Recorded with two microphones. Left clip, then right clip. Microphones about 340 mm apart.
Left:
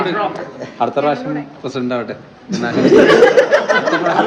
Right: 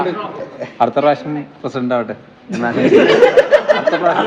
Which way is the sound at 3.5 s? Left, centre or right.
Right.